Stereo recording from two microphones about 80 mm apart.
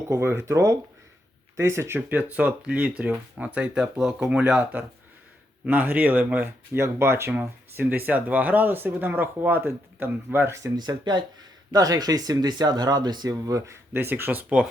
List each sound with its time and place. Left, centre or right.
0.1 s speech: right
2.0 s speech: centre
6.7 s speech: right
10.8 s speech: right
11.7 s speech: right